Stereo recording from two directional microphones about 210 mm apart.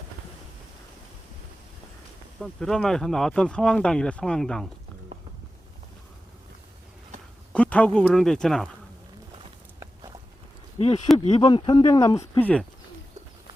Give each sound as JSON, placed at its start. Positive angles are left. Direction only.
{"t": 2.4, "sound": "speech", "side_deg": 0}
{"t": 7.5, "sound": "speech", "side_deg": 5}
{"t": 10.8, "sound": "speech", "side_deg": 30}